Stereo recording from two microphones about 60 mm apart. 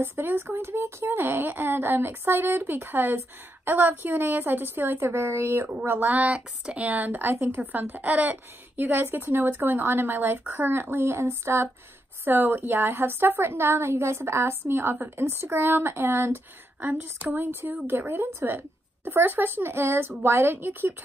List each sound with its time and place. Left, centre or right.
0.0 s speech: right
5.0 s a woman's voice: right
5.9 s a woman's voice: right
12.3 s a woman's voice: right
15.0 s speech: right
17.4 s speech: right